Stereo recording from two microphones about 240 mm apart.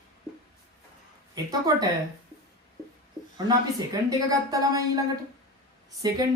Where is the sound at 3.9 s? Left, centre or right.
Centre.